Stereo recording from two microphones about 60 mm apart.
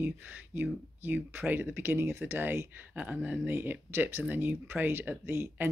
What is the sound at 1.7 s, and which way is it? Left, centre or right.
Speech, right.